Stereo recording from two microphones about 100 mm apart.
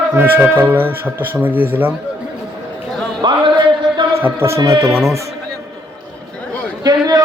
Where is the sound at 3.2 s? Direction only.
50° right (ahead or behind).